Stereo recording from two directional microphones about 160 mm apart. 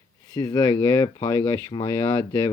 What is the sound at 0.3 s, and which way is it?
Speech, 25° left (ahead or behind).